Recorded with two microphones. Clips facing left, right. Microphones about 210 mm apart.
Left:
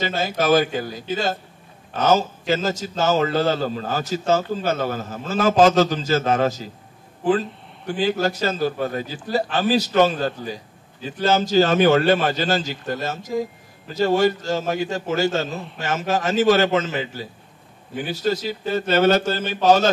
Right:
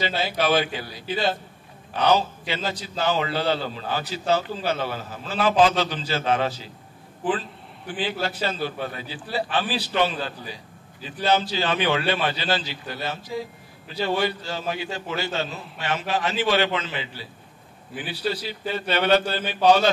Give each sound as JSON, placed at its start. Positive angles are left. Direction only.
{"t": 0.0, "sound": "a man's voice", "side_deg": 45}